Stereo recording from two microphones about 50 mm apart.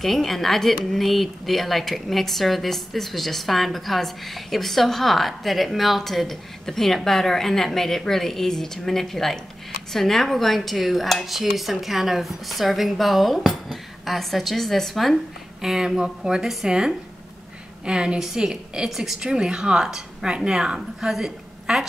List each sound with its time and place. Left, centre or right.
0.0 s speech: centre
15.6 s a woman's voice: centre